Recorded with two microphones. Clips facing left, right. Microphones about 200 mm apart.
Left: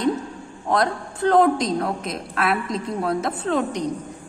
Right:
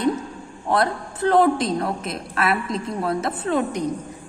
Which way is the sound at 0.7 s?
5° right (ahead or behind).